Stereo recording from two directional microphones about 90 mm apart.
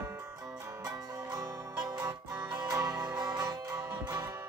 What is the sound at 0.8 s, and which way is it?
Music, 45° right (ahead or behind).